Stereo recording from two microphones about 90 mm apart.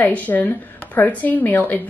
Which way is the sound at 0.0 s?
15° left (ahead or behind).